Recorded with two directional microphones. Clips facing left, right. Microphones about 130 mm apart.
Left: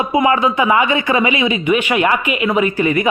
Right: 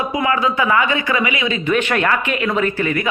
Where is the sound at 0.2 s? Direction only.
20° left (ahead or behind).